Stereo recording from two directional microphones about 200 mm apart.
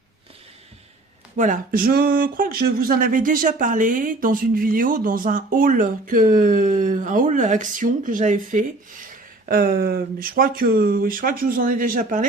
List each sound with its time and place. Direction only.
1.4 s speech: 40° right (ahead or behind)